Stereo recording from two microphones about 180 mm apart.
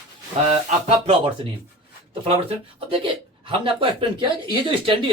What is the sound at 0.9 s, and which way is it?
Speech, 30° right (ahead or behind).